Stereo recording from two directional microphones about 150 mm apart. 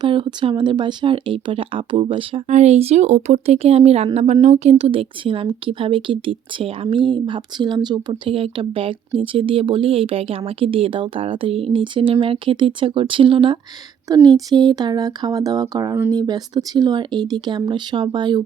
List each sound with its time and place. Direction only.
0.0 s speech: 30° right (ahead or behind)
14.1 s speech: 25° right (ahead or behind)